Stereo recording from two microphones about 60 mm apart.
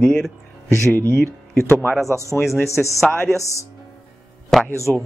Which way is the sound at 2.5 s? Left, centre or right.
Left.